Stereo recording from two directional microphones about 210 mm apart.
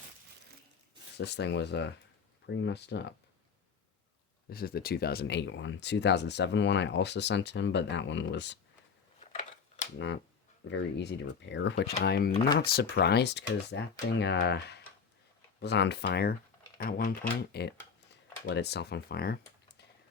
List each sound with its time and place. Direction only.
1.2 s speech: 55° left (ahead or behind)
4.4 s speech: 45° left (ahead or behind)
9.2 s a sound: 35° left (ahead or behind)
10.7 s speech: 55° left (ahead or behind)